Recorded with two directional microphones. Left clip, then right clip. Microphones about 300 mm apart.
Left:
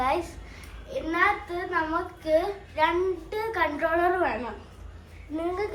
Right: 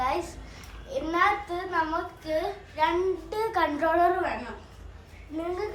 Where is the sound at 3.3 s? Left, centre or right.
Centre.